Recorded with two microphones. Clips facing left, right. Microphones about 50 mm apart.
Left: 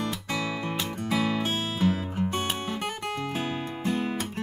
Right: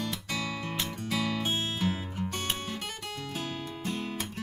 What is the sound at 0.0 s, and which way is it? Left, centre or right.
Music, left.